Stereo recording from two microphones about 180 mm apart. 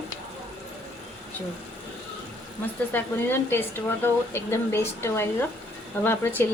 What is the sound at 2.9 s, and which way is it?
Speech, 10° left (ahead or behind).